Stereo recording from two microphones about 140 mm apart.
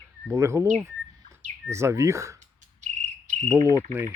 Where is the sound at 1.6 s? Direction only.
20° right (ahead or behind).